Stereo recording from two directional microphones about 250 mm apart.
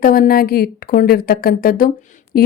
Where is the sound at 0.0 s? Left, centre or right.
Left.